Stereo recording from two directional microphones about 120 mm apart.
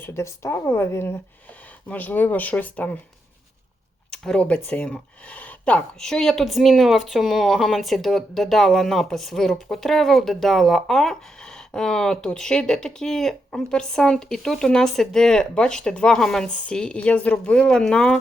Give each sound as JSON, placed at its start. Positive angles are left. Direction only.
{"t": 0.0, "sound": "speech", "side_deg": 20}
{"t": 4.1, "sound": "speech", "side_deg": 5}